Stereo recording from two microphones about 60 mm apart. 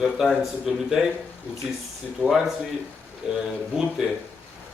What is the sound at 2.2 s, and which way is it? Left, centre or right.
Speech, left.